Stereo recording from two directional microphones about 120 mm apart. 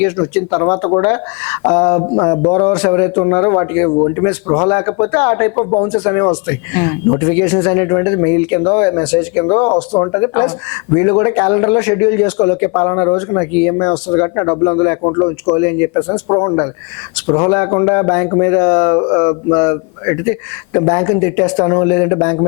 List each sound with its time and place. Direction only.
0.0 s a man's voice: 20° left (ahead or behind)